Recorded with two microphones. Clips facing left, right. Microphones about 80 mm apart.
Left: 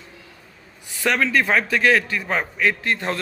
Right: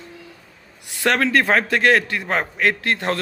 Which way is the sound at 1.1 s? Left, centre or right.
Right.